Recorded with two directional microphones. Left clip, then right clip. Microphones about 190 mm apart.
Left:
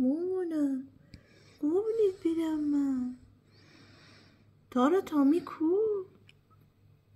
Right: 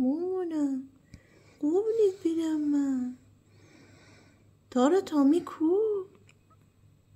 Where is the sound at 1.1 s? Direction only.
10° right (ahead or behind).